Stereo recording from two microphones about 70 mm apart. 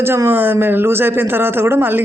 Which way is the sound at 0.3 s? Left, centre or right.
Right.